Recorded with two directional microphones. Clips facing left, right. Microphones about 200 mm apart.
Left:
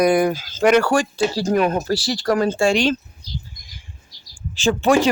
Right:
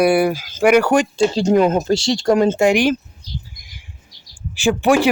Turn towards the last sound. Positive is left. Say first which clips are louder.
# right 1 dB
turn(degrees=-15)  # may be behind; listen again after turning